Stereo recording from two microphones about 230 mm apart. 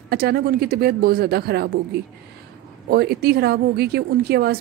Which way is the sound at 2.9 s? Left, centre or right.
Right.